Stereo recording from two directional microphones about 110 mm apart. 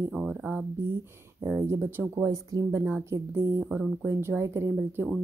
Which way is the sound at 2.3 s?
30° right (ahead or behind).